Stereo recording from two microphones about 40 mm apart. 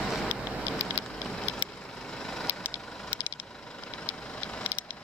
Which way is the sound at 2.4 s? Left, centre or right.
Right.